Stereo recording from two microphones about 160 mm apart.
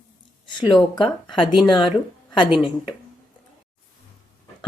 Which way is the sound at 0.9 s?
30° left (ahead or behind).